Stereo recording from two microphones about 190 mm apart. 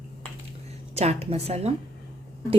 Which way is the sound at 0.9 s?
35° right (ahead or behind).